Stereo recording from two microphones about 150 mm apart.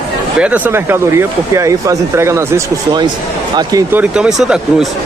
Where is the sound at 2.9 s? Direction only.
30° right (ahead or behind).